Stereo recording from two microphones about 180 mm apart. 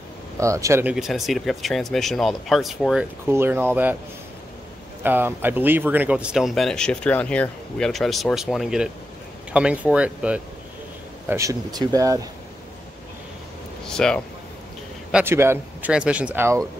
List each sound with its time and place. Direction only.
0.4 s speech: 15° right (ahead or behind)
0.9 s speech: centre (ahead or behind)
5.0 s speech: 10° right (ahead or behind)
13.8 s speech: 5° left (ahead or behind)
15.0 s speech: 10° right (ahead or behind)